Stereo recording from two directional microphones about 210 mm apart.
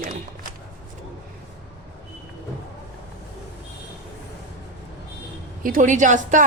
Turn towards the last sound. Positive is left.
turn(degrees=-35)  # may be behind; listen again after turning